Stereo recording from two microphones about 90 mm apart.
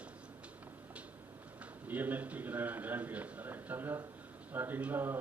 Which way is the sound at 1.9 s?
20° right (ahead or behind).